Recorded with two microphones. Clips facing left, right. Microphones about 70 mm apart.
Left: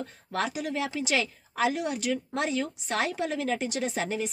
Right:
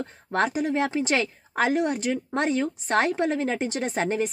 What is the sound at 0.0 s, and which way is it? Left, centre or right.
A woman's voice, right.